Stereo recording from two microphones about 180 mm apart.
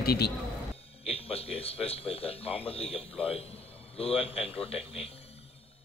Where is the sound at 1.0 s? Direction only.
35° left (ahead or behind).